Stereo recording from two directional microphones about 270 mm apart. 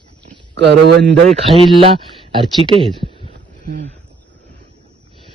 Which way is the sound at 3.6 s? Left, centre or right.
Right.